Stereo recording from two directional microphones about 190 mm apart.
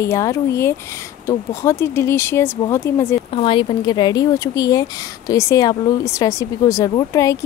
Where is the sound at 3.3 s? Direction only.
25° left (ahead or behind).